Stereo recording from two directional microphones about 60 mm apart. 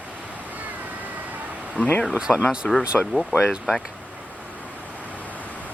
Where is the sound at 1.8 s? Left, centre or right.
Left.